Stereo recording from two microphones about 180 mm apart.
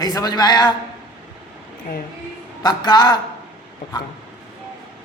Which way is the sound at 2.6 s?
25° left (ahead or behind).